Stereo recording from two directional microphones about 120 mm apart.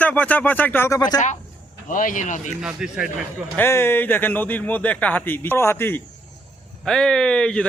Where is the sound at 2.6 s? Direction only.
5° right (ahead or behind).